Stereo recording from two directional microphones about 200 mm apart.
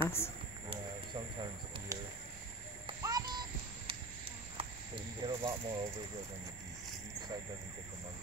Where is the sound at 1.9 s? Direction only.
15° right (ahead or behind).